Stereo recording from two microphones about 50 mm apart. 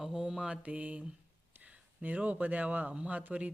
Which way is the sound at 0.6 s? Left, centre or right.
Right.